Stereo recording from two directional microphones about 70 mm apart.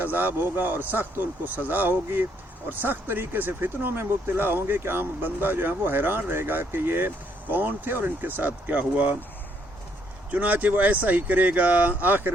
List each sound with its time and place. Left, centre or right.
0.0 s speech: right
10.3 s speech: right